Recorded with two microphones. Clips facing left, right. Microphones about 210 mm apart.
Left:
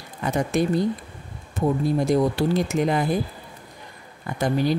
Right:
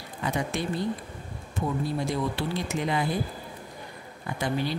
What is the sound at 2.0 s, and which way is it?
Speech, 45° left (ahead or behind).